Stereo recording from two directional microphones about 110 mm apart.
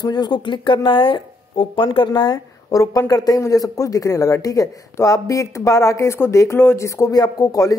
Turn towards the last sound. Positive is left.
turn(degrees=30)  # may be behind; listen again after turning